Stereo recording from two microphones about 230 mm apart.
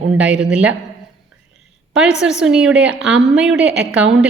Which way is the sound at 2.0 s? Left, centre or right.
Centre.